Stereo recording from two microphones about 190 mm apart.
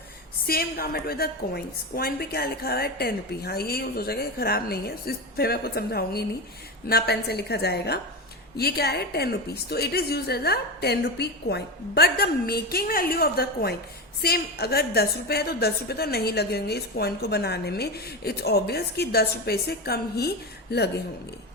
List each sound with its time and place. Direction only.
0.4 s a woman's voice: 55° left (ahead or behind)